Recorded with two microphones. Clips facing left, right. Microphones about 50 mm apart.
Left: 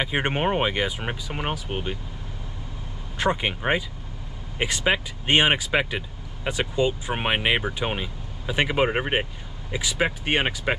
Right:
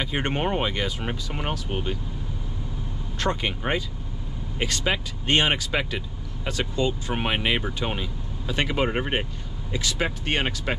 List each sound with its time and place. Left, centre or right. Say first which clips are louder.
0.0 s speech: left 2 dB; centre
3.2 s speech: left 2 dB; centre